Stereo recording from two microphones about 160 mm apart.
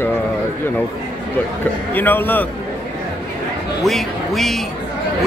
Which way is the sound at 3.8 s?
Centre (ahead or behind).